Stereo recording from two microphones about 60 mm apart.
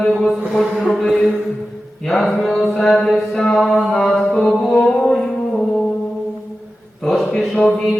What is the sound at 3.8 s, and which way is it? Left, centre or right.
Music, centre.